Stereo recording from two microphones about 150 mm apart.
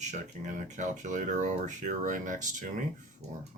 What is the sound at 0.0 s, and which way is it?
Speech, 50° right (ahead or behind).